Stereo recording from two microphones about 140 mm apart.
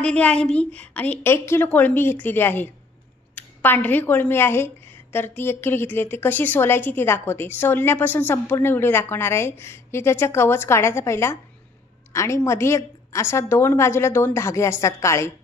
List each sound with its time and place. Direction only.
0.0 s a woman's voice: 10° left (ahead or behind)